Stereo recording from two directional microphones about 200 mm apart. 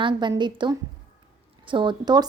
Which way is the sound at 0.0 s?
20° right (ahead or behind).